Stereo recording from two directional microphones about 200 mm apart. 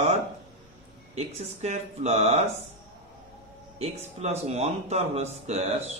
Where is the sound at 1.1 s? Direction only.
35° right (ahead or behind).